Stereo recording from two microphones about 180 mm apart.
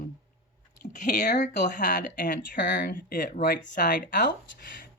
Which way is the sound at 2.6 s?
70° left (ahead or behind).